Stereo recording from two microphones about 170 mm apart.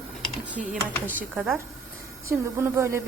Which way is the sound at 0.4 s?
10° right (ahead or behind).